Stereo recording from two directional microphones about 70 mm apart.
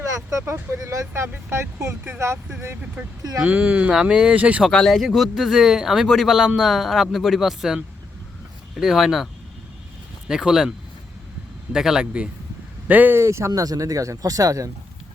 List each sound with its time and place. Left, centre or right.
0.4 s speech: right
0.8 s speech: right
1.3 s speech: right
1.8 s speech: right
3.4 s speech: right
4.7 s speech: centre
8.8 s speech: centre
11.7 s speech: centre
12.9 s speech: right
13.1 s speech: right
13.5 s speech: right